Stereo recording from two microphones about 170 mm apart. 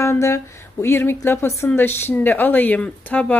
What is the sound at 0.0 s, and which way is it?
A woman's voice, 15° left (ahead or behind).